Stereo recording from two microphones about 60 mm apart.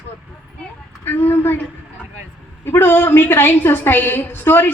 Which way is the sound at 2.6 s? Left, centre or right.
Left.